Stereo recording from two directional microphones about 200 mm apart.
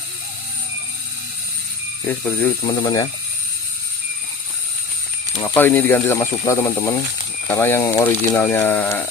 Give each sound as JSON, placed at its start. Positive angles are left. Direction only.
{"t": 2.0, "sound": "speech", "side_deg": 5}
{"t": 2.6, "sound": "speech", "side_deg": 20}
{"t": 5.4, "sound": "speech", "side_deg": 10}